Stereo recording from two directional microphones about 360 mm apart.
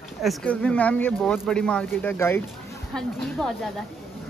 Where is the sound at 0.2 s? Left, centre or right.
Centre.